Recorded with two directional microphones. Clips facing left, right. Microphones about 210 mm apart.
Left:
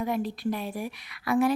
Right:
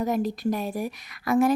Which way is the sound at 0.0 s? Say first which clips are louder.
Right 3 dB; 40° right (ahead or behind).